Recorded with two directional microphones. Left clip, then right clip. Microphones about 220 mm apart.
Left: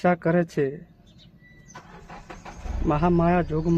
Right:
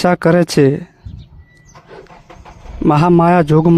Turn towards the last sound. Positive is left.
turn(degrees=-45)  # may be behind; listen again after turning